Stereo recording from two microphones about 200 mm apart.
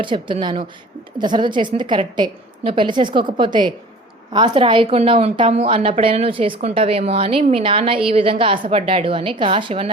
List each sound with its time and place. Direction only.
0.0 s a woman's voice: 25° right (ahead or behind)